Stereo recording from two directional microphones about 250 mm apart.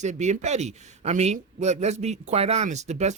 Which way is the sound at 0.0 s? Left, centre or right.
Right.